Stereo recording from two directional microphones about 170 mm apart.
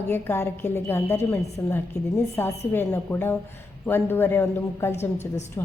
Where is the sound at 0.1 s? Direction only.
15° left (ahead or behind).